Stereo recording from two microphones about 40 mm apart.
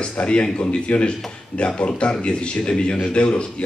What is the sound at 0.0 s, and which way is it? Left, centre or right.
A man's voice, left.